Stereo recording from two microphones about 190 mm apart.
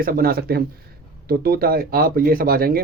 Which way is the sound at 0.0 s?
50° right (ahead or behind).